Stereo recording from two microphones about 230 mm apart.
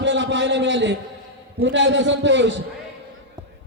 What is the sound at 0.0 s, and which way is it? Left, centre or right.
A man's voice, right.